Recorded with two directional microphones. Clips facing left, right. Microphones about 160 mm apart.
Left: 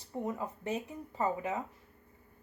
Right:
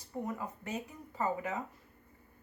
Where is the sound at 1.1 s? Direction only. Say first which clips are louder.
Left 1 dB; 25° left (ahead or behind).